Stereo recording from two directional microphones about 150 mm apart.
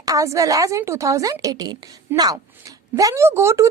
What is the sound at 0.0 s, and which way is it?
A woman's voice, 20° right (ahead or behind).